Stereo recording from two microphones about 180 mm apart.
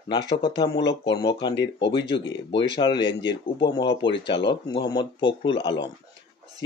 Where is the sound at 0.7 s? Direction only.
75° left (ahead or behind).